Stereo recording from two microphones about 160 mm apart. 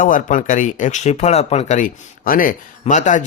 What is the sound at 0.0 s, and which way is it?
Speech, 55° left (ahead or behind).